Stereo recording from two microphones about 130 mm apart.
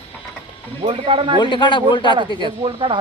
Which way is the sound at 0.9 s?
45° right (ahead or behind).